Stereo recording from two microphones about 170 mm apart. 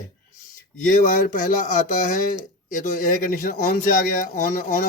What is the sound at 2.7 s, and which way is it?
Speech, 50° left (ahead or behind).